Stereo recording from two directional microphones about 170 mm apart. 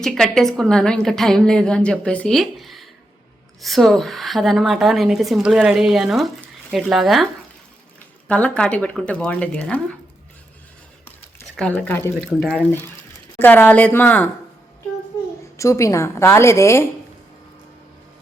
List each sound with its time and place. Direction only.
0.0 s a woman's voice: 5° left (ahead or behind)
8.3 s speech: 5° left (ahead or behind)
11.5 s speech: 5° left (ahead or behind)
12.2 s a woman's voice: centre (ahead or behind)
13.4 s speech: 10° left (ahead or behind)
15.5 s speech: 20° left (ahead or behind)